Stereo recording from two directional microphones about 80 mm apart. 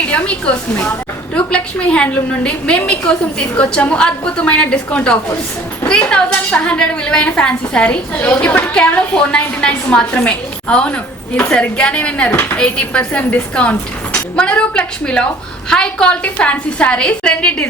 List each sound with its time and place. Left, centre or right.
0.1 s a woman's voice: centre